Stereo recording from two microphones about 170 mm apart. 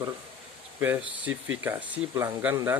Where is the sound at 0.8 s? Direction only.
10° right (ahead or behind).